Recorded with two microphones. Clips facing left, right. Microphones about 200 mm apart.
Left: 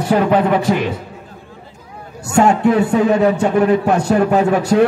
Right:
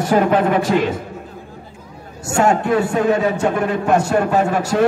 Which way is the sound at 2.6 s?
60° left (ahead or behind).